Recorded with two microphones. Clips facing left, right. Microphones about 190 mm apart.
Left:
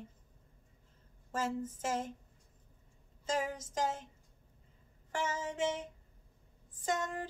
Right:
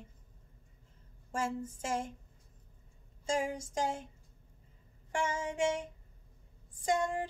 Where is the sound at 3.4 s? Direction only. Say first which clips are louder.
Right 1 dB; 15° right (ahead or behind).